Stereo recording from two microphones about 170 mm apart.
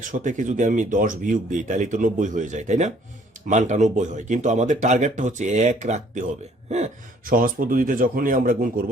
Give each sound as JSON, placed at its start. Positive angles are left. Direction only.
{"t": 0.0, "sound": "speech", "side_deg": -50}
{"t": 6.7, "sound": "a sound", "side_deg": -40}
{"t": 7.3, "sound": "speech", "side_deg": -55}